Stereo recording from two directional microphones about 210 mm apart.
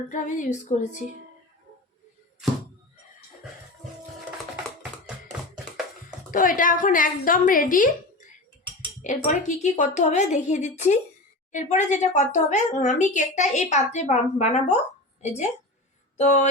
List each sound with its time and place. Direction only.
0.1 s speech: 35° left (ahead or behind)
6.3 s speech: 40° left (ahead or behind)
16.1 s speech: 35° left (ahead or behind)